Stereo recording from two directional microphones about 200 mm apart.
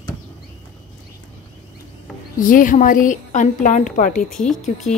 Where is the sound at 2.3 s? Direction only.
45° left (ahead or behind).